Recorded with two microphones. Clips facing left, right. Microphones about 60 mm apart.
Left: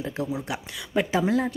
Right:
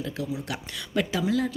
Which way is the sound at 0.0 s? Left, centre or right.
Left.